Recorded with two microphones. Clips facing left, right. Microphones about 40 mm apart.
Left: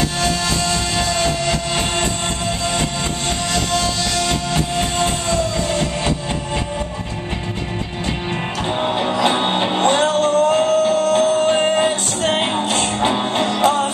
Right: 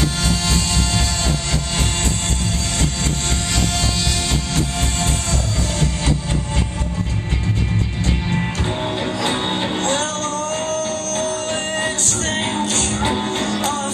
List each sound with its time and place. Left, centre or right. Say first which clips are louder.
0.0 s music: left 2 dB; centre
4.6 s music: left 3 dB; centre
8.8 s music: left 6 dB; left